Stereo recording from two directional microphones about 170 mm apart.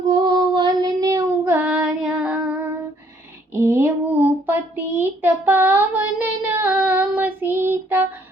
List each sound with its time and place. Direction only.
0.1 s child singing: 25° right (ahead or behind)